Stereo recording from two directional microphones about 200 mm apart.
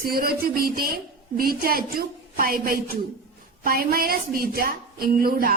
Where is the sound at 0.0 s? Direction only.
50° right (ahead or behind).